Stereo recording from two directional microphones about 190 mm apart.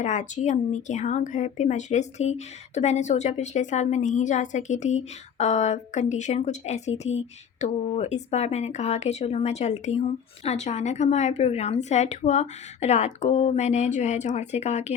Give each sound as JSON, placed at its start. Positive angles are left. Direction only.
{"t": 0.0, "sound": "a woman's voice", "side_deg": 40}